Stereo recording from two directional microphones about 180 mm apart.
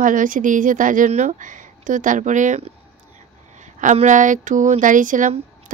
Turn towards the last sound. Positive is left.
turn(degrees=-45)  # may be behind; listen again after turning